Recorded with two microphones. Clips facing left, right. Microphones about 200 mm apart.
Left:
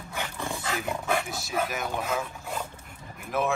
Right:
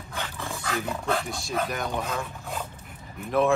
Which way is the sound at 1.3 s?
5° left (ahead or behind).